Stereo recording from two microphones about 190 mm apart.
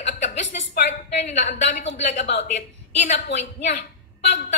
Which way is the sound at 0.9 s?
35° left (ahead or behind).